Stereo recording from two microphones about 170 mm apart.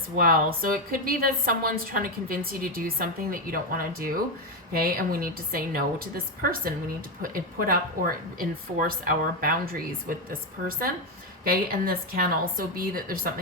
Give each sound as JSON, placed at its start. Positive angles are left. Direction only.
{"t": 0.2, "sound": "a woman's voice", "side_deg": -60}